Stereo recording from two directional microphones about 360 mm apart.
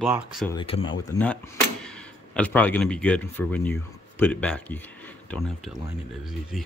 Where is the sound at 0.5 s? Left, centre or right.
Centre.